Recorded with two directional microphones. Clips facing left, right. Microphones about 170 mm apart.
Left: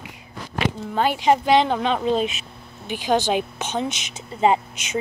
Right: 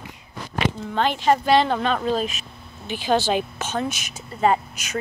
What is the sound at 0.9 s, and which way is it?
Speech, 10° left (ahead or behind).